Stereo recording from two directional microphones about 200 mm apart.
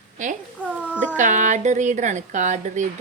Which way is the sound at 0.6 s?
5° right (ahead or behind).